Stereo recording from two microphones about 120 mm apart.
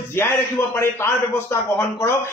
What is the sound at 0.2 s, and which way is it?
A man's voice, 20° left (ahead or behind).